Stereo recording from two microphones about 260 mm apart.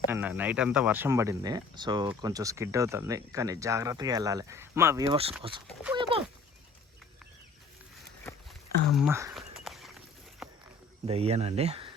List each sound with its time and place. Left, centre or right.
0.1 s speech: centre
9.0 s a sound: centre
11.0 s speech: right